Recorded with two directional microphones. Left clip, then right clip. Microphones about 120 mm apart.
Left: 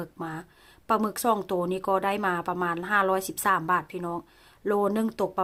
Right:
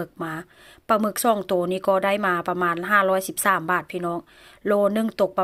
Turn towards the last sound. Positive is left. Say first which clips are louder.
# right 6 dB
turn(degrees=-15)  # may be behind; listen again after turning